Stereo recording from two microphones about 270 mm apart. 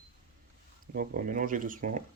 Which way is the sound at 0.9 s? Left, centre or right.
Right.